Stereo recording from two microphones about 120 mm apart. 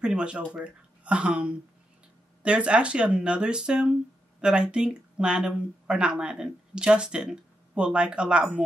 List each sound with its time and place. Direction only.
0.0 s speech: 10° right (ahead or behind)